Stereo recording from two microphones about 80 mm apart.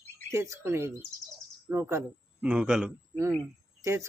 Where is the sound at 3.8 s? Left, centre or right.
Right.